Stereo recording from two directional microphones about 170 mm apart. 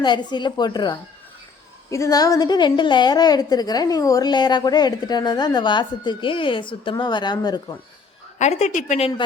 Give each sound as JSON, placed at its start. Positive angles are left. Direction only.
{"t": 0.0, "sound": "a woman's voice", "side_deg": 25}
{"t": 8.4, "sound": "speech", "side_deg": 40}